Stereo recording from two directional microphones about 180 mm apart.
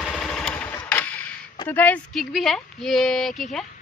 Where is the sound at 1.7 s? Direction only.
10° left (ahead or behind).